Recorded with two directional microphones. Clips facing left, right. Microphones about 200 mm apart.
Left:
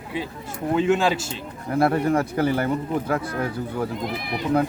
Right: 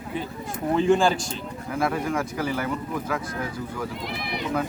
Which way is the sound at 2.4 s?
60° left (ahead or behind).